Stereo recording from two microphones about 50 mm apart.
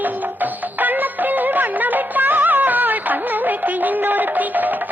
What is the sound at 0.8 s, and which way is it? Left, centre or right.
Music, right.